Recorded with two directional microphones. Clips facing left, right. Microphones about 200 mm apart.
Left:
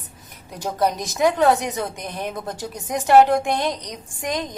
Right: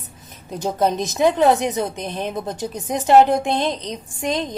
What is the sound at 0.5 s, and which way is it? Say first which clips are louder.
A woman's voice: right 3 dB; 25° right (ahead or behind).